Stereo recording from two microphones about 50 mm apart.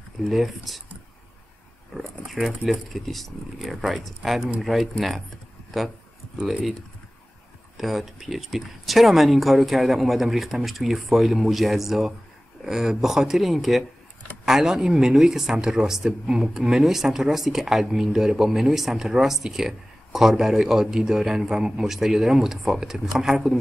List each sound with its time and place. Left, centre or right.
0.2 s speech: centre
2.0 s speech: centre
7.7 s speech: centre
16.1 s speech: centre
16.5 s speech: centre